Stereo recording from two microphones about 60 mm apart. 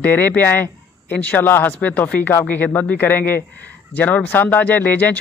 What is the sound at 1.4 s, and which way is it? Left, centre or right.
Speech, left.